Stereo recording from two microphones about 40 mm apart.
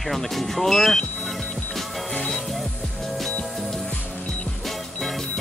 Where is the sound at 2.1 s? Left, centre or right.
Left.